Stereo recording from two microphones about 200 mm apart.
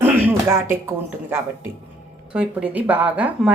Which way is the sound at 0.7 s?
10° right (ahead or behind).